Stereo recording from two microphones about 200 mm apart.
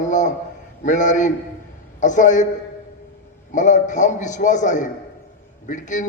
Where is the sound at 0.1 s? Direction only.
40° left (ahead or behind).